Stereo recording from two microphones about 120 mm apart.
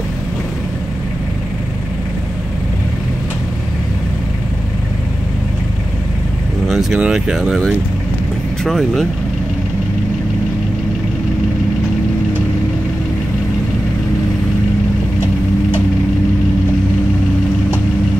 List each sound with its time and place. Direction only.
6.7 s speech: centre (ahead or behind)